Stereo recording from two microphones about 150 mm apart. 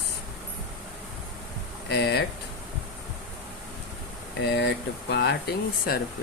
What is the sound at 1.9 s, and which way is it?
Speech, 90° left.